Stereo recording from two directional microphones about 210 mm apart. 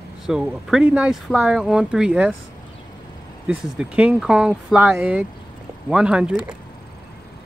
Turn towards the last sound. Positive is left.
turn(degrees=-5)  # may be behind; listen again after turning